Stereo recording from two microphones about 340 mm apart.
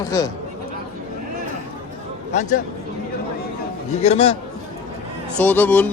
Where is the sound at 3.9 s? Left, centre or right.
Centre.